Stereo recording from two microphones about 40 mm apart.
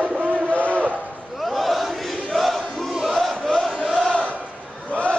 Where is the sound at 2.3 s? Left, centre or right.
Centre.